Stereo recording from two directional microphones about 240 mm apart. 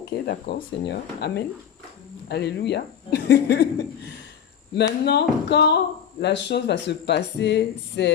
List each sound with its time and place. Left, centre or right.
0.3 s speech: left
4.7 s speech: left